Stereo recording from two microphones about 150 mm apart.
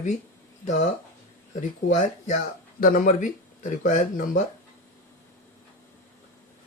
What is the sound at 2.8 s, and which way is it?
Speech, 70° left (ahead or behind).